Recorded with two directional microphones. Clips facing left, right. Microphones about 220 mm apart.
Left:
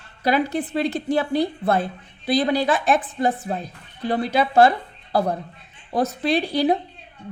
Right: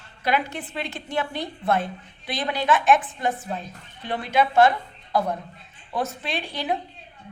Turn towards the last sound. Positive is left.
turn(degrees=35)  # may be behind; listen again after turning